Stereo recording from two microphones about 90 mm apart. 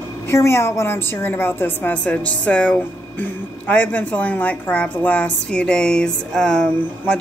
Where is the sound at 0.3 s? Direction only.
30° left (ahead or behind).